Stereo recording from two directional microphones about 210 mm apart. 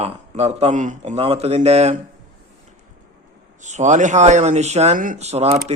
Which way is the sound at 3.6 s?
35° right (ahead or behind).